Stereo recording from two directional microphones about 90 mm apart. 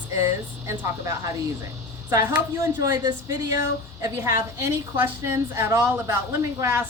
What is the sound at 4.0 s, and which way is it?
Speech, 35° right (ahead or behind).